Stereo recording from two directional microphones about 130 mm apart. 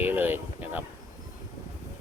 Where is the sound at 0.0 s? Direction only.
15° right (ahead or behind).